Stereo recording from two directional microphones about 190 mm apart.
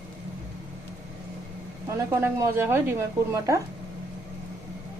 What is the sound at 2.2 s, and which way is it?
Speech, 10° right (ahead or behind).